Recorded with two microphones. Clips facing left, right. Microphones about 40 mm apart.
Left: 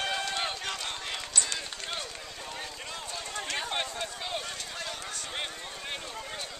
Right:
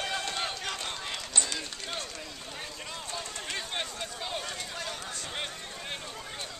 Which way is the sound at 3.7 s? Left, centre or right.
Centre.